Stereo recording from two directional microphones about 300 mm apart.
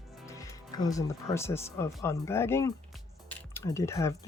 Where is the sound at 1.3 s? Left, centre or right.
Centre.